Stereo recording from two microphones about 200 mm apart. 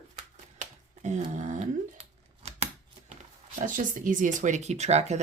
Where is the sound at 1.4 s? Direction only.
40° right (ahead or behind).